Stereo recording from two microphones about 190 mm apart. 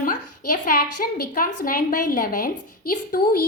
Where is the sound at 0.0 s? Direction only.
45° left (ahead or behind).